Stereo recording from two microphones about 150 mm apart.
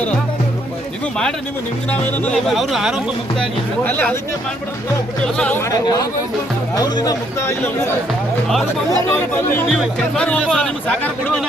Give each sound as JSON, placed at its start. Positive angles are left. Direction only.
{"t": 1.9, "sound": "speech", "side_deg": 10}
{"t": 2.5, "sound": "speech", "side_deg": 0}
{"t": 5.4, "sound": "speech", "side_deg": 10}
{"t": 5.8, "sound": "speech", "side_deg": 25}
{"t": 9.3, "sound": "speech", "side_deg": 15}